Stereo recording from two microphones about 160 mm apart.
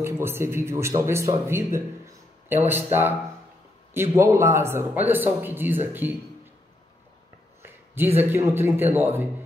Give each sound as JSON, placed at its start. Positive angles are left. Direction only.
{"t": 0.0, "sound": "speech", "side_deg": -15}
{"t": 7.6, "sound": "a sound", "side_deg": -15}
{"t": 8.5, "sound": "speech", "side_deg": -15}